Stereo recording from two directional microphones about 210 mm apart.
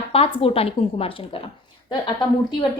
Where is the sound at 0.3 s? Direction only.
25° left (ahead or behind).